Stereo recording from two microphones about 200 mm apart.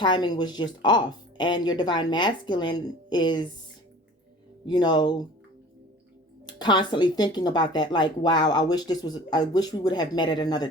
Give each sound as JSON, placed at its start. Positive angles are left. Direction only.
{"t": 0.0, "sound": "speech", "side_deg": 20}
{"t": 4.6, "sound": "speech", "side_deg": 20}
{"t": 6.4, "sound": "speech", "side_deg": 20}